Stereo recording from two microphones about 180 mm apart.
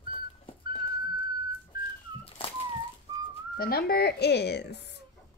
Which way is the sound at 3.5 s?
55° left (ahead or behind).